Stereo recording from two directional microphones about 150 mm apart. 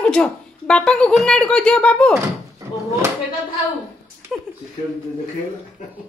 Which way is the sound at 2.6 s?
20° right (ahead or behind).